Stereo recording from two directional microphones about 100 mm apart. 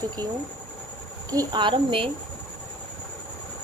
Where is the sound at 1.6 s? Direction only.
55° right (ahead or behind).